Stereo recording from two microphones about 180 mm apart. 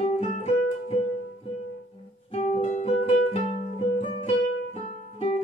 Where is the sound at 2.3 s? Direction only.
40° left (ahead or behind).